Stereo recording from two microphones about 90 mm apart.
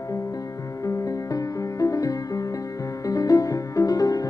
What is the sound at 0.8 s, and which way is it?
Music, 40° left (ahead or behind).